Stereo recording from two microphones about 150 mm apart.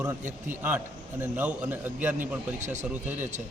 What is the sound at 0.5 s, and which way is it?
A man's voice, 15° right (ahead or behind).